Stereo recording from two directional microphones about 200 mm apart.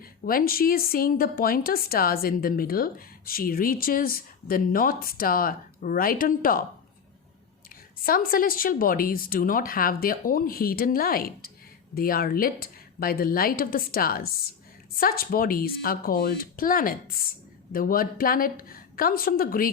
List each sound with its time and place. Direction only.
0.0 s speech: 45° left (ahead or behind)
8.0 s speech: 45° left (ahead or behind)